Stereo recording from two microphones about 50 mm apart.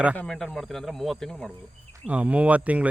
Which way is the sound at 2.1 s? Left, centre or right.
Right.